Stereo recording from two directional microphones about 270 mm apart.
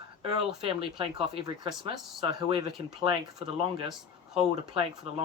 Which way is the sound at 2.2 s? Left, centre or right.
Centre.